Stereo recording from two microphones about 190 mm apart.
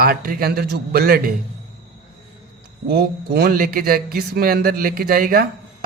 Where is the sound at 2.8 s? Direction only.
55° right (ahead or behind).